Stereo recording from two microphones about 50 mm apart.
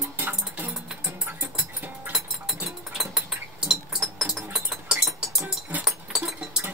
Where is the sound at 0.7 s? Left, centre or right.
Centre.